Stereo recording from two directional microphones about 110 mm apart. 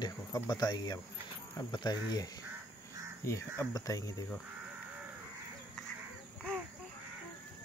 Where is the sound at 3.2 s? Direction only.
25° left (ahead or behind).